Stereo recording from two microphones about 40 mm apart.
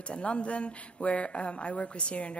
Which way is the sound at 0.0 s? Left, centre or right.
Left.